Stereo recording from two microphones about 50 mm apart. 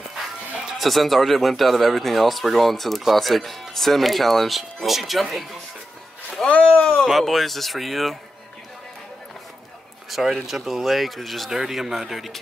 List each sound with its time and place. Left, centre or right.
0.7 s speech: centre
6.5 s a sound: left
7.1 s speech: centre
10.0 s speech: centre